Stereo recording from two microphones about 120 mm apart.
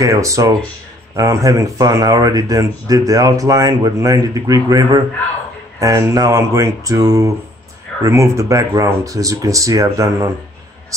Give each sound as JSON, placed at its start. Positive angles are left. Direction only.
{"t": 0.0, "sound": "speech", "side_deg": -25}